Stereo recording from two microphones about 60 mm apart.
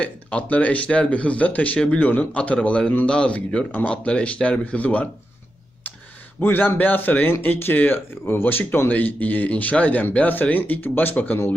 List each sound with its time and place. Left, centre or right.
0.0 s speech: left
6.4 s speech: left